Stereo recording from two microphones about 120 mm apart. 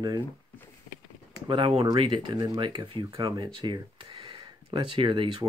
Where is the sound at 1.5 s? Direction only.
50° right (ahead or behind).